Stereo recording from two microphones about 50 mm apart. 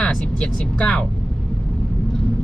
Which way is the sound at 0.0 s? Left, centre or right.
Centre.